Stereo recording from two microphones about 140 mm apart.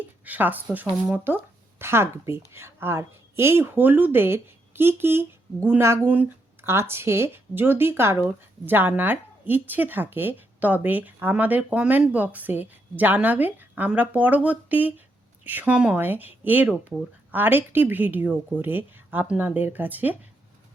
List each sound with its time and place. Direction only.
0.0 s speech: 15° right (ahead or behind)